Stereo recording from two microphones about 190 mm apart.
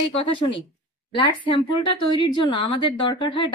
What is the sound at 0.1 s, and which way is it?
Speech, 30° left (ahead or behind).